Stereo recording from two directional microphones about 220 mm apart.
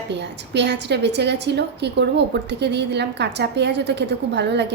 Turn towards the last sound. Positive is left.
turn(degrees=-50)  # may be behind; listen again after turning